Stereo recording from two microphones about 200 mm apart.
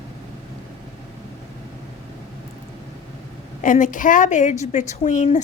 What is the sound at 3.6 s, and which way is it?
A woman's voice, 40° left (ahead or behind).